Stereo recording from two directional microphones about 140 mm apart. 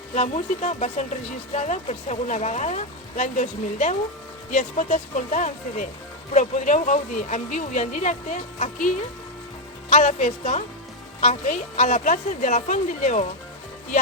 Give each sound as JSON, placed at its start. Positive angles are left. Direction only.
{"t": 0.1, "sound": "speech", "side_deg": 55}
{"t": 9.9, "sound": "speech", "side_deg": 65}